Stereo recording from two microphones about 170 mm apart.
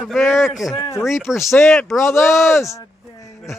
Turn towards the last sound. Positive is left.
turn(degrees=15)  # may be behind; listen again after turning